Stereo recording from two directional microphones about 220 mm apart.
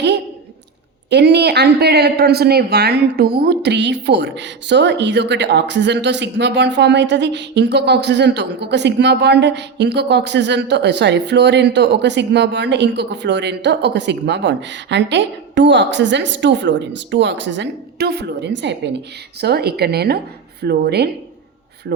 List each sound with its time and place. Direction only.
1.1 s a woman's voice: 50° right (ahead or behind)